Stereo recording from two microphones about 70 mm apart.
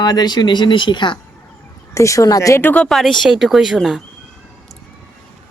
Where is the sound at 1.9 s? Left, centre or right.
Left.